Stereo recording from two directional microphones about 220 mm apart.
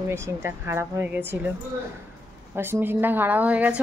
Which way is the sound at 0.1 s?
10° right (ahead or behind).